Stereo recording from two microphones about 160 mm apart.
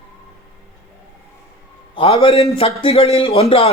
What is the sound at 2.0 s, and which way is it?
A man's voice, 35° left (ahead or behind).